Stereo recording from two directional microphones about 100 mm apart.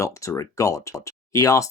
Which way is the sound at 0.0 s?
30° left (ahead or behind).